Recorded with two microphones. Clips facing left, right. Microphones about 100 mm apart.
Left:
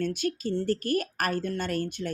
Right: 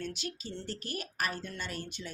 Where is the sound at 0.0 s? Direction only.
50° left (ahead or behind).